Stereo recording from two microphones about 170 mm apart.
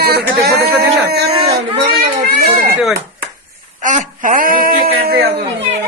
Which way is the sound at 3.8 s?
50° right (ahead or behind).